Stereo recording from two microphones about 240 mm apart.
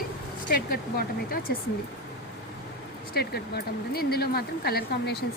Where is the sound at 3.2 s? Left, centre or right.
Left.